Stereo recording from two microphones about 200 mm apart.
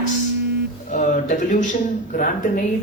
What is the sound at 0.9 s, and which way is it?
A man's voice, 40° left (ahead or behind).